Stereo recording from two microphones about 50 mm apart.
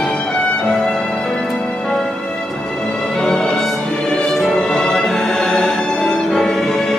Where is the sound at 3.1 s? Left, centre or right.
Centre.